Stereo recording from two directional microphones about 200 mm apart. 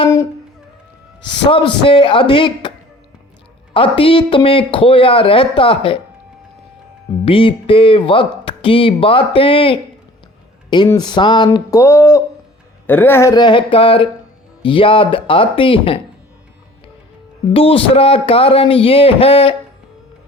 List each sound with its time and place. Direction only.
0.0 s music: 15° left (ahead or behind)
1.5 s speech: 25° left (ahead or behind)
3.8 s speech: 25° left (ahead or behind)
7.3 s speech: 25° left (ahead or behind)
10.8 s speech: 20° left (ahead or behind)
17.5 s speech: 25° left (ahead or behind)